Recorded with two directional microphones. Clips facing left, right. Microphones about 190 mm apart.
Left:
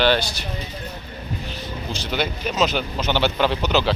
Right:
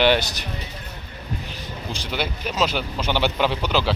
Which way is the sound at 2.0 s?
10° right (ahead or behind).